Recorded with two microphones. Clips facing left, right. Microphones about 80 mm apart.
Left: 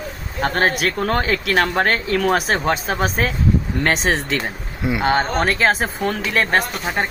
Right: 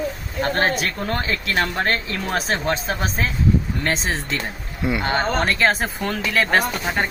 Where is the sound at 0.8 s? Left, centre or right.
Left.